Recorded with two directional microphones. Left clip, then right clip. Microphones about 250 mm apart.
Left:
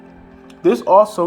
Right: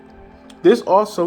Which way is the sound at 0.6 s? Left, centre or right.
Right.